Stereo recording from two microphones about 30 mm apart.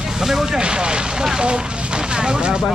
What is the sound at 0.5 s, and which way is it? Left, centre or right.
Speech, right.